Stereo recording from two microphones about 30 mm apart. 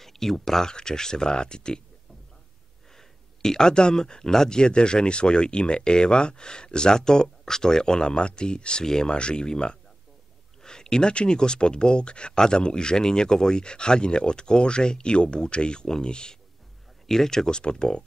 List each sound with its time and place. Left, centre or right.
0.0 s speech: centre
0.7 s speech: left
3.0 s speech: centre
4.6 s speech: left
17.0 s speech: centre
17.5 s speech: left